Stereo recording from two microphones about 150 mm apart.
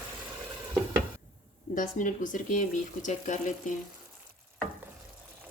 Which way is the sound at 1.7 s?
60° left (ahead or behind).